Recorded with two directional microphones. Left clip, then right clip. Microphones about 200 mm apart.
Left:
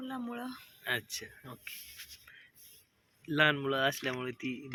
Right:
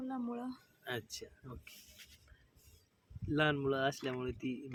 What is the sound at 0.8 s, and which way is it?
Speech, 10° left (ahead or behind).